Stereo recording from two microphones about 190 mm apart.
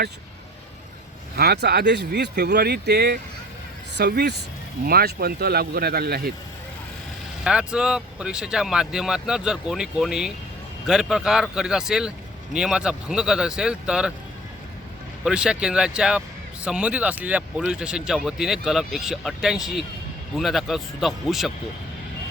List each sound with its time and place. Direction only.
1.4 s speech: 55° right (ahead or behind)
7.4 s speech: 5° right (ahead or behind)
15.2 s speech: 5° right (ahead or behind)